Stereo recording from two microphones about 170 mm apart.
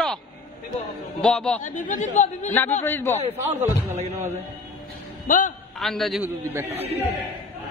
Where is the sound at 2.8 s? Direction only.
15° left (ahead or behind).